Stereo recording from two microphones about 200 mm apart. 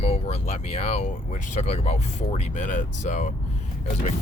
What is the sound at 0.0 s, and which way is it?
Speech, 30° left (ahead or behind).